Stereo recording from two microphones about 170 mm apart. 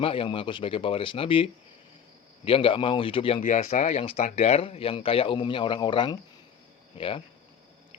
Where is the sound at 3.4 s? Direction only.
45° left (ahead or behind).